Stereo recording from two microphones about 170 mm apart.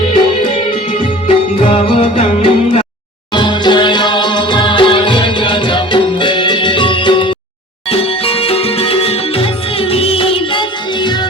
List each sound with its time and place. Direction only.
0.1 s music: 35° left (ahead or behind)